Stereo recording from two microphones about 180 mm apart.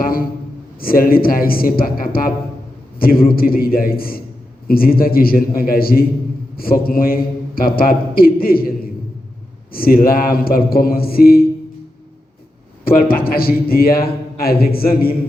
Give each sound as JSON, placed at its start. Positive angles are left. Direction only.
{"t": 0.0, "sound": "a man's voice", "side_deg": 55}
{"t": 12.8, "sound": "a man's voice", "side_deg": 55}